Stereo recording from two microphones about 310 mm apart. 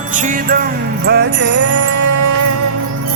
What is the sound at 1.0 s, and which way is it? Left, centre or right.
Jingle bell, right.